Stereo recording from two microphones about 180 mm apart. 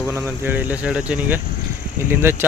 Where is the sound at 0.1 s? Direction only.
10° right (ahead or behind).